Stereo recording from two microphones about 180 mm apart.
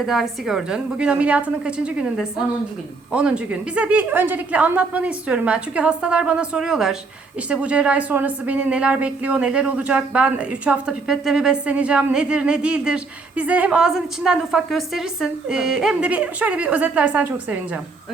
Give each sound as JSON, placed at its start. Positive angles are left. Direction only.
{"t": 0.0, "sound": "a woman's voice", "side_deg": 0}